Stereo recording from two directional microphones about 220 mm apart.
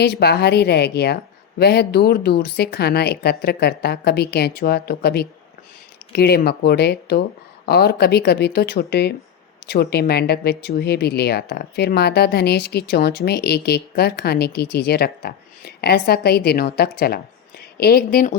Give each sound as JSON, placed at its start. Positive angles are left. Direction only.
{"t": 0.0, "sound": "speech", "side_deg": 50}